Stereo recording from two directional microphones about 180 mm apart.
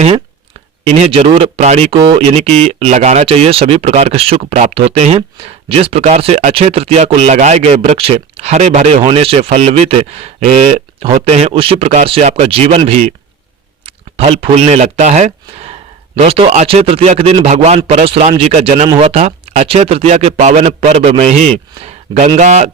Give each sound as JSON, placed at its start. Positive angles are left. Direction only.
{"t": 0.9, "sound": "speech", "side_deg": -35}